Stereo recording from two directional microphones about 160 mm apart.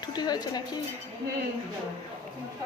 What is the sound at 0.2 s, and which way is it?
Speech, 25° left (ahead or behind).